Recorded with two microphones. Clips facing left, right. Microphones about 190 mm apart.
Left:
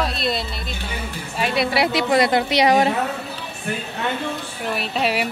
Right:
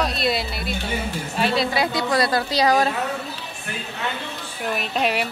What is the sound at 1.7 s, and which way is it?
A woman's voice, 20° left (ahead or behind).